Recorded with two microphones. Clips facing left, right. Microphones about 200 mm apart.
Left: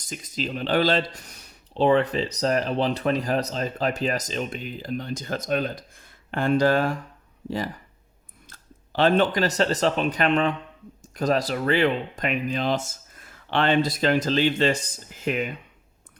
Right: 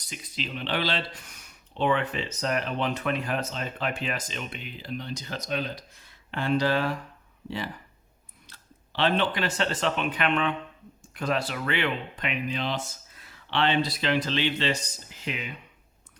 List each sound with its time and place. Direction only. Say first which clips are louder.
0.0 s speech: left 6 dB; 45° left (ahead or behind)